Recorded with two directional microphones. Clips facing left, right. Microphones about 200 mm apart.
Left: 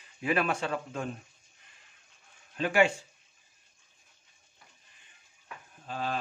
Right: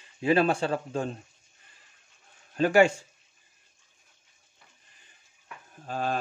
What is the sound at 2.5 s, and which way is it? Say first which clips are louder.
Speech: right 5 dB; 40° right (ahead or behind).